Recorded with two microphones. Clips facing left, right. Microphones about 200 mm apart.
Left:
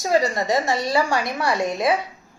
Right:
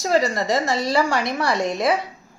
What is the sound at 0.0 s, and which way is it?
A woman's voice, 15° left (ahead or behind).